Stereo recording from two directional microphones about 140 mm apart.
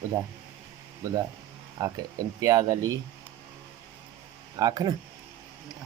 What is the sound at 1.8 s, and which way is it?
Speech, 30° right (ahead or behind).